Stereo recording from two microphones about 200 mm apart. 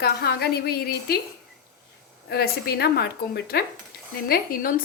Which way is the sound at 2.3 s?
55° left (ahead or behind).